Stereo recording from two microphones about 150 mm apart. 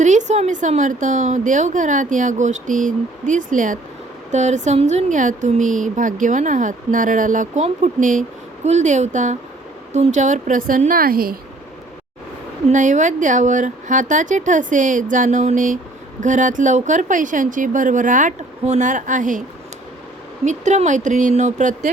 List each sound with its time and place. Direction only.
0.0 s a woman's voice: 55° right (ahead or behind); by 11.3 s 80° right
12.6 s a woman's voice: 55° right (ahead or behind)
20.4 s a woman's voice: 55° right (ahead or behind)